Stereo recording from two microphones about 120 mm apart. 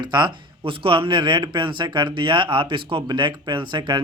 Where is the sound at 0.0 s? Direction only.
40° right (ahead or behind).